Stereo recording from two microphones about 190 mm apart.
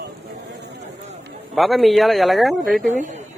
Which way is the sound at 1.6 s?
Centre (ahead or behind).